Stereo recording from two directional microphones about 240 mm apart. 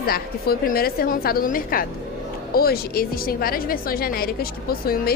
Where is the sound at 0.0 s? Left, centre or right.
Left.